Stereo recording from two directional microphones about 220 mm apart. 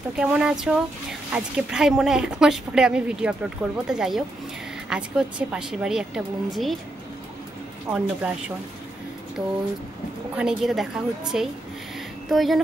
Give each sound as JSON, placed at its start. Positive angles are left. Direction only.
{"t": 0.1, "sound": "a woman's voice", "side_deg": -5}
{"t": 7.9, "sound": "a woman's voice", "side_deg": -5}